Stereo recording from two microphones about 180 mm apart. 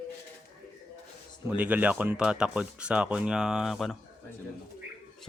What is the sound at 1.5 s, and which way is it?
Speech, 10° right (ahead or behind).